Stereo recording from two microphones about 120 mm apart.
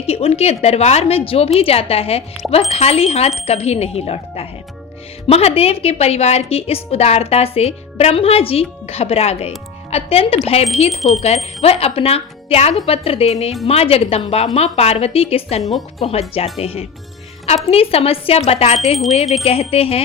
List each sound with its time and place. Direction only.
0.0 s a woman's voice: 60° left (ahead or behind)